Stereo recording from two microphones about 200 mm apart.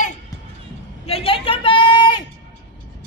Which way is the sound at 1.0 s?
30° left (ahead or behind).